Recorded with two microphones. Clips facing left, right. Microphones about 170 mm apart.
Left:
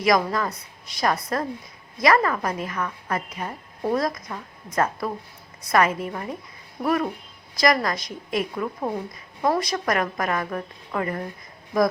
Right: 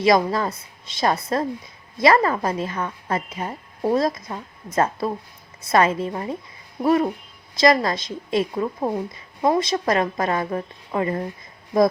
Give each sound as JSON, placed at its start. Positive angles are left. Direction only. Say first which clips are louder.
{"t": 0.0, "sound": "a woman's voice", "louder": "right 3 dB", "side_deg": -25}